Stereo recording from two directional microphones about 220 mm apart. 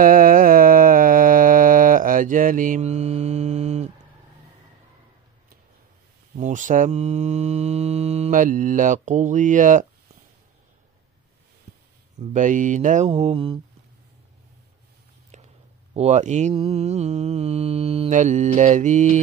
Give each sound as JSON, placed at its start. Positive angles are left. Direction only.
{"t": 0.0, "sound": "mantra", "side_deg": -40}
{"t": 6.3, "sound": "mantra", "side_deg": -35}
{"t": 12.2, "sound": "mantra", "side_deg": -35}
{"t": 15.9, "sound": "mantra", "side_deg": -30}